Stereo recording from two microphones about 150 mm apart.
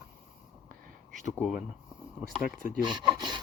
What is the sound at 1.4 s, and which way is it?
Speech, centre (ahead or behind).